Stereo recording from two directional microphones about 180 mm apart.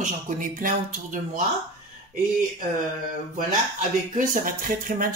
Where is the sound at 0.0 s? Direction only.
50° right (ahead or behind).